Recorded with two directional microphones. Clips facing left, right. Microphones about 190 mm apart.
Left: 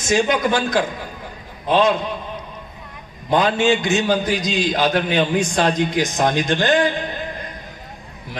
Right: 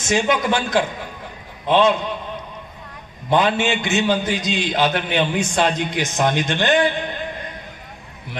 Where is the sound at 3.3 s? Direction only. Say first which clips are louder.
Left 2 dB; 40° left (ahead or behind).